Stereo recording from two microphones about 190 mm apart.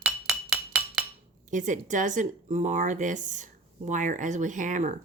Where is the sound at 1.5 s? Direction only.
40° right (ahead or behind).